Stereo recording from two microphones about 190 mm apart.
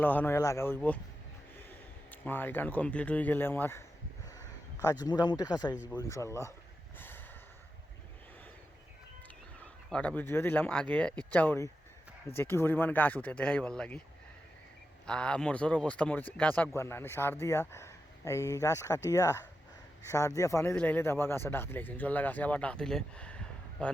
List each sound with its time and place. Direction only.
0.0 s speech: 10° left (ahead or behind)
2.0 s speech: 10° left (ahead or behind)
4.4 s a sound: 15° left (ahead or behind)
5.0 s speech: 20° left (ahead or behind)
9.9 s speech: 5° left (ahead or behind)
15.0 s speech: 5° left (ahead or behind)